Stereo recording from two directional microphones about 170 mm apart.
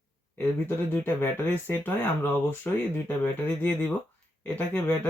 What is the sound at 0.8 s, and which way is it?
Speech, 10° left (ahead or behind).